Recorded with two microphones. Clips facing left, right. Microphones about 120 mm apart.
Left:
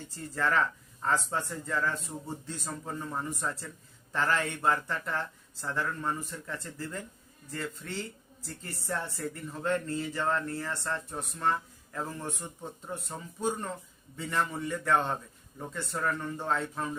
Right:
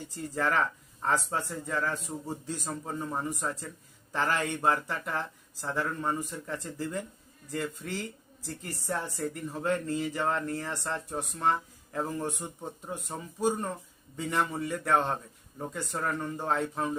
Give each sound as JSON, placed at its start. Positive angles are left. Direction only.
{"t": 0.3, "sound": "a man's voice", "side_deg": -15}